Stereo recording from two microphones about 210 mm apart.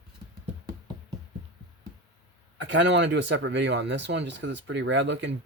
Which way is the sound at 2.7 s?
60° right (ahead or behind).